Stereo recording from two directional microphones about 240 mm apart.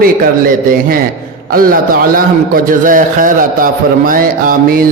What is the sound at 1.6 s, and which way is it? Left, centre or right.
A man's voice, right.